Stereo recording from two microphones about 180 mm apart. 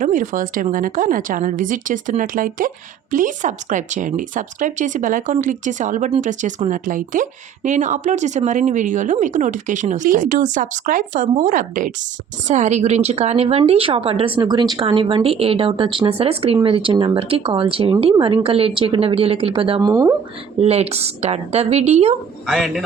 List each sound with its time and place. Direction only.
0.0 s a woman's voice: 50° right (ahead or behind); by 20.1 s 20° right (ahead or behind)
20.6 s a woman's voice: 35° right (ahead or behind)
22.4 s a man's voice: centre (ahead or behind)